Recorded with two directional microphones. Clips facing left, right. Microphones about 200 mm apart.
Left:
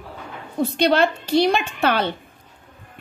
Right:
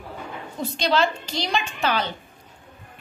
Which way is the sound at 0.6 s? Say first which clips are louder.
Left 5 dB; 60° left (ahead or behind).